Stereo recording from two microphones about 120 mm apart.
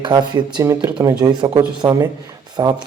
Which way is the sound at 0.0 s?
40° right (ahead or behind).